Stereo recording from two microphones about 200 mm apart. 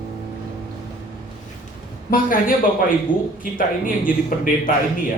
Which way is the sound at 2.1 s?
45° left (ahead or behind).